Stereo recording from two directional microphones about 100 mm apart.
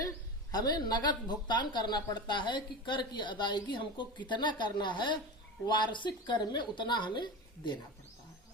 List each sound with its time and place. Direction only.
0.5 s a woman's voice: 45° left (ahead or behind)